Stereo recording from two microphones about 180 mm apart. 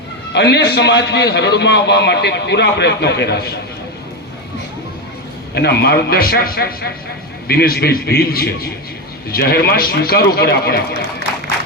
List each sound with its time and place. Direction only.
0.3 s a man's voice: 70° left (ahead or behind)
5.5 s a man's voice: 65° left (ahead or behind)